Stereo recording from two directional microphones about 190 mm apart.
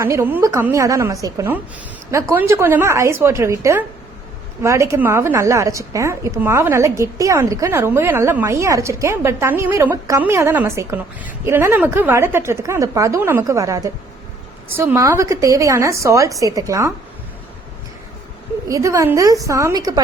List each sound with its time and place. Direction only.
0.0 s a woman's voice: 15° right (ahead or behind)
18.7 s a woman's voice: 15° right (ahead or behind)